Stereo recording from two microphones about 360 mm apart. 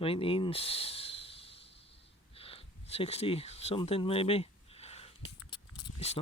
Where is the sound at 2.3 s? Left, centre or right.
Centre.